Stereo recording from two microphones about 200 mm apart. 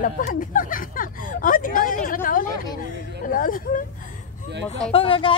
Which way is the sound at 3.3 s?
45° left (ahead or behind).